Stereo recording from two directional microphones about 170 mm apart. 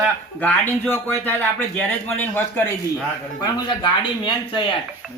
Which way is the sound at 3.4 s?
30° left (ahead or behind).